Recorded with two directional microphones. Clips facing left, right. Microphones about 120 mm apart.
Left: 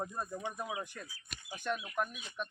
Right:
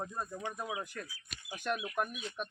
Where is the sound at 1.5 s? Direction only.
10° right (ahead or behind).